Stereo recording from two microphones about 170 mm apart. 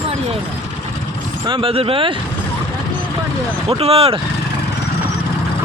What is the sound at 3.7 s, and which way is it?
Speech, 35° right (ahead or behind).